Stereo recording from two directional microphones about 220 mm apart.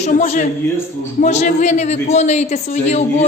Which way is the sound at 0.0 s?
35° left (ahead or behind).